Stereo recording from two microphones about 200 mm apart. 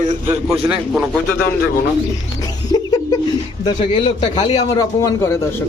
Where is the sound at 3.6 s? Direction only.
25° left (ahead or behind).